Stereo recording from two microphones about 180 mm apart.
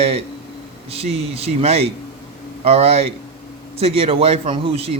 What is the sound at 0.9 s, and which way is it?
A man's voice, 35° right (ahead or behind).